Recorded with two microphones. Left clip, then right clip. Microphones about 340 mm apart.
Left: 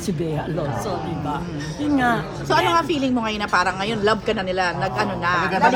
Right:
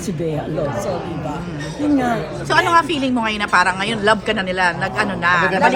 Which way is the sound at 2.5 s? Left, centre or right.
Right.